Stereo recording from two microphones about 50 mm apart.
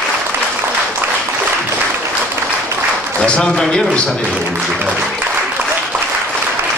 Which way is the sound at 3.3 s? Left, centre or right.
Left.